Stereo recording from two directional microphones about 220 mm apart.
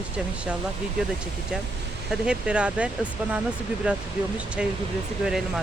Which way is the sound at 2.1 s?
5° right (ahead or behind).